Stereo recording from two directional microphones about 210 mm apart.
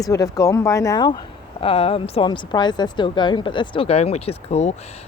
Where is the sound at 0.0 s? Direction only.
15° left (ahead or behind).